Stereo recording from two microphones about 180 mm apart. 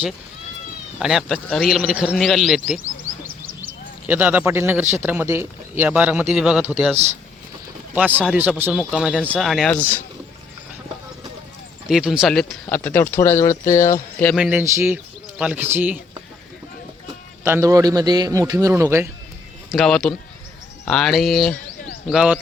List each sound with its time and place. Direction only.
0.9 s a man's voice: centre (ahead or behind)
4.0 s a man's voice: 10° right (ahead or behind)
6.9 s speech: 35° right (ahead or behind)
7.9 s a man's voice: 10° right (ahead or behind); by 10.0 s 5° left (ahead or behind)
11.9 s a man's voice: 5° right (ahead or behind); by 13.9 s 15° left (ahead or behind)
14.3 s a man's voice: 5° right (ahead or behind)
17.4 s a man's voice: 15° right (ahead or behind)
19.7 s a man's voice: 5° left (ahead or behind)